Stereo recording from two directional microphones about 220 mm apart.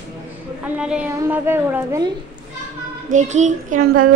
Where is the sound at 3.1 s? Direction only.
35° right (ahead or behind).